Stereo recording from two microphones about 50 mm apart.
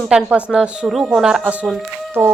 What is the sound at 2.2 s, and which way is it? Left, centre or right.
Speech, right.